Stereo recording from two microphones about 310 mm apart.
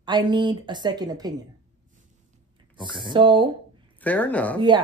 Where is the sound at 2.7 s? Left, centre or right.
Centre.